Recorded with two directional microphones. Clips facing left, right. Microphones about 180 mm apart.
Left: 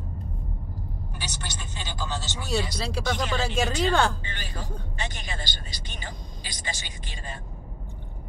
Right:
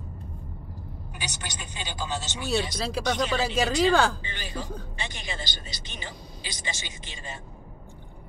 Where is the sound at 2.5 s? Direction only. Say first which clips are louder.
Right 1 dB; centre (ahead or behind).